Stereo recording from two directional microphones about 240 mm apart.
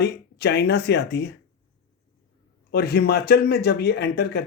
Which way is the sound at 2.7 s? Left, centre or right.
Left.